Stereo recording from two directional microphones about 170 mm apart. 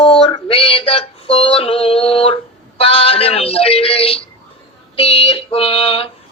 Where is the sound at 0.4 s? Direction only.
35° left (ahead or behind).